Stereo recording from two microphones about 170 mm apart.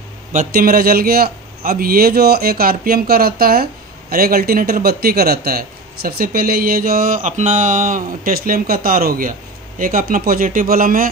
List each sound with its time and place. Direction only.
0.3 s speech: 55° right (ahead or behind)